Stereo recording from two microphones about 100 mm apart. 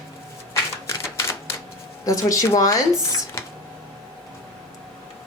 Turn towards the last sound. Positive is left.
turn(degrees=35)  # may be behind; listen again after turning